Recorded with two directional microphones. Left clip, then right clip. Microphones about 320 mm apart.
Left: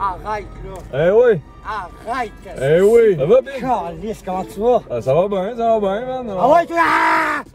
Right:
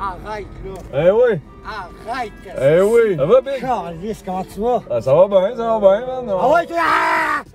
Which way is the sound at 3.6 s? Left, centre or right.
Left.